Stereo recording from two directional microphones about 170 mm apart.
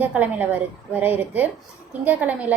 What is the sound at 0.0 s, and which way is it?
A woman's voice, 10° right (ahead or behind).